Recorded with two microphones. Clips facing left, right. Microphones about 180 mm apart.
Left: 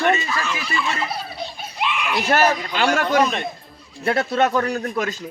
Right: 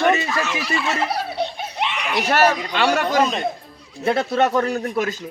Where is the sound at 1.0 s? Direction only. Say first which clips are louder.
Right 5 dB; 70° right (ahead or behind).